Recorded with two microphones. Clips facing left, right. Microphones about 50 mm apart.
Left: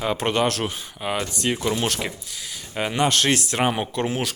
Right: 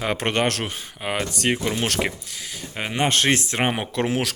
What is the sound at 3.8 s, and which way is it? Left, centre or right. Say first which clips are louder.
Speech: right 1 dB; right.